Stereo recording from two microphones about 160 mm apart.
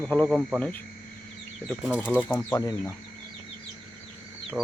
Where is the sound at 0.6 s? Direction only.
10° left (ahead or behind).